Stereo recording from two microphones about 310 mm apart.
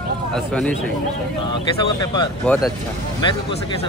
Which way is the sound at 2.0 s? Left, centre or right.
Centre.